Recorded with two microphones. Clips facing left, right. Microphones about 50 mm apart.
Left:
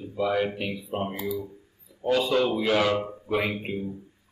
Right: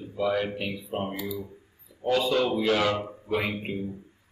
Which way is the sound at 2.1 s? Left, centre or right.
Centre.